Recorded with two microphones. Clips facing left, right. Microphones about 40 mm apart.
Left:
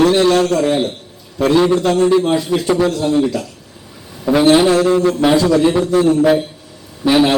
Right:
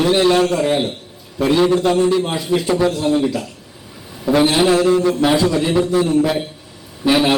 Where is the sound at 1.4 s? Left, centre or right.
Centre.